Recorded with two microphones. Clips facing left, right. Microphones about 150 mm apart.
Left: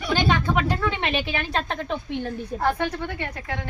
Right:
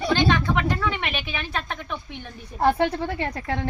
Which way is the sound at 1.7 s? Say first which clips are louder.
Left 4 dB; 35° left (ahead or behind).